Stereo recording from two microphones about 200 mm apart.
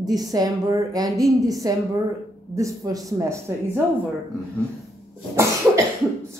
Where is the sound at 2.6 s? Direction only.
15° right (ahead or behind).